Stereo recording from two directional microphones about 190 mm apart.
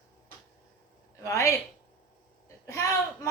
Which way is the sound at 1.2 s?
15° left (ahead or behind).